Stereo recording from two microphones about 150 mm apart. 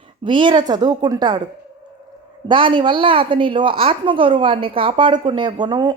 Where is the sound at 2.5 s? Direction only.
35° right (ahead or behind).